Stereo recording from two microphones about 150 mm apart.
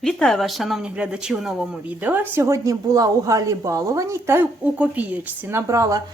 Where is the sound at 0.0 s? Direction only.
5° left (ahead or behind).